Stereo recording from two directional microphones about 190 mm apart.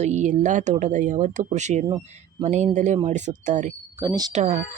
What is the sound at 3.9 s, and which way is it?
Speech, 20° right (ahead or behind).